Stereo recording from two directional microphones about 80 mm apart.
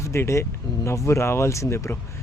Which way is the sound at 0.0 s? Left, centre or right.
Left.